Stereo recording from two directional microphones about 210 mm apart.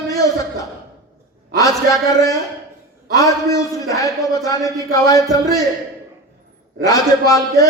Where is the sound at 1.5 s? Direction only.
15° left (ahead or behind).